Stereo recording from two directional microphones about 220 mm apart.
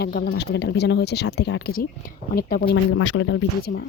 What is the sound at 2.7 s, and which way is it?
Speech, 65° left (ahead or behind).